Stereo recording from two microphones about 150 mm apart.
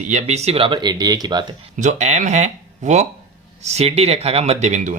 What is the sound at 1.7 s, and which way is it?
Speech, 50° right (ahead or behind).